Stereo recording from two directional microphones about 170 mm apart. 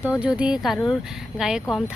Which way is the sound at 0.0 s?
5° right (ahead or behind).